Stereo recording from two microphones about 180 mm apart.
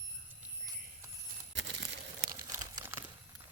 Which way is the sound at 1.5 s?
80° right.